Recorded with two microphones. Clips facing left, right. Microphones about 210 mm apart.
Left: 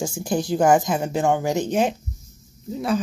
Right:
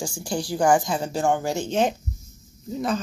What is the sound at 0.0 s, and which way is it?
Speech, 20° left (ahead or behind).